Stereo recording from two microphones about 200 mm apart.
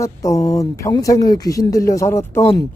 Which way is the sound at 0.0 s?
15° left (ahead or behind).